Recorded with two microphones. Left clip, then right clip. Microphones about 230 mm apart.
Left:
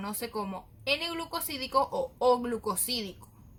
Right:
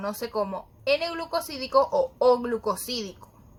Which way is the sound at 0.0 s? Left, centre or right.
Centre.